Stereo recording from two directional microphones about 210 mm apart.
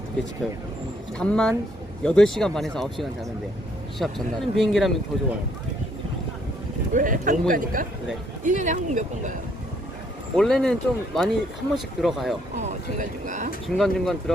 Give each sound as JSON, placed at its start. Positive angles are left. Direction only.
{"t": 1.2, "sound": "speech", "side_deg": 5}
{"t": 6.9, "sound": "speech", "side_deg": -40}
{"t": 10.3, "sound": "speech", "side_deg": 0}
{"t": 12.5, "sound": "speech", "side_deg": -35}
{"t": 13.7, "sound": "speech", "side_deg": 0}